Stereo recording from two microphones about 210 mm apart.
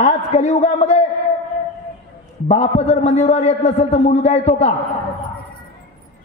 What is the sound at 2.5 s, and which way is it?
A man's voice, 30° left (ahead or behind).